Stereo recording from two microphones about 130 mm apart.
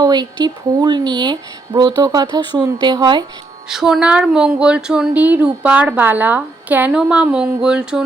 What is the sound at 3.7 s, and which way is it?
Speech, 5° right (ahead or behind).